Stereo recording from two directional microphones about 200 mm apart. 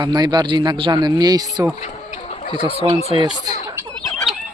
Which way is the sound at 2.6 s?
30° right (ahead or behind).